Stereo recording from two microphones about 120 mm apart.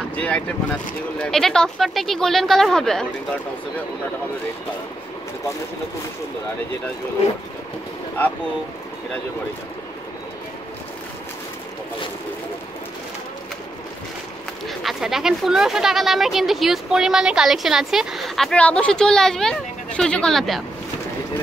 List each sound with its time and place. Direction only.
0.1 s speech: 10° left (ahead or behind)
14.7 s speech: centre (ahead or behind)